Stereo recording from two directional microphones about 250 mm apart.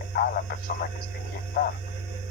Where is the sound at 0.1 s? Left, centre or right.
Left.